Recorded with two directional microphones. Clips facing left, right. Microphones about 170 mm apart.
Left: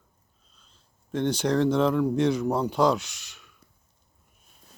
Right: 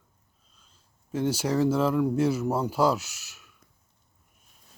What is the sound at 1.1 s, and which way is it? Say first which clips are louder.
Speech: left 2 dB; 10° right (ahead or behind).